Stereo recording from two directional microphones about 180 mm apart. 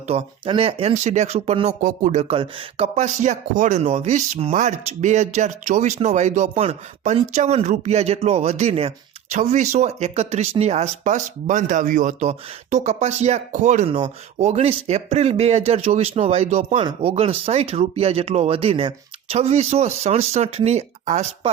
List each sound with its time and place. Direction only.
0.1 s speech: 30° right (ahead or behind)
13.9 s speech: 30° right (ahead or behind)